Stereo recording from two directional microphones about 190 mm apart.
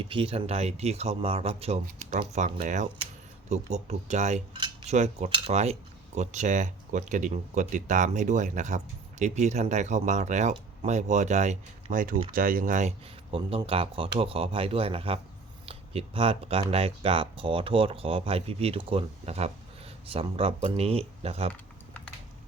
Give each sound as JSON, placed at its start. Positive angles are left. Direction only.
{"t": 0.0, "sound": "speech", "side_deg": -25}
{"t": 2.1, "sound": "speech", "side_deg": -45}
{"t": 13.3, "sound": "speech", "side_deg": -30}